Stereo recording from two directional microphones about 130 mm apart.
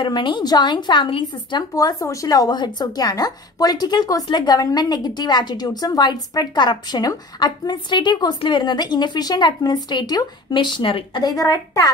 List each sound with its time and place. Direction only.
0.0 s a woman's voice: 40° left (ahead or behind)
11.2 s a woman's voice: 30° left (ahead or behind)